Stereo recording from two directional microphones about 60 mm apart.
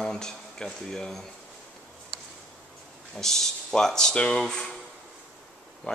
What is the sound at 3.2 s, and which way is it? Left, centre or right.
Speech, centre.